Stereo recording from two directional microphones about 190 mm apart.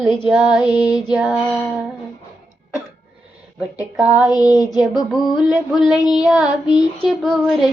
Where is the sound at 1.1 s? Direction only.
10° right (ahead or behind).